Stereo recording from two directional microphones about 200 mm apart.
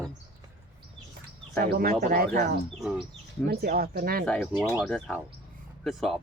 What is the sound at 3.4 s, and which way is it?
Speech, 50° right (ahead or behind).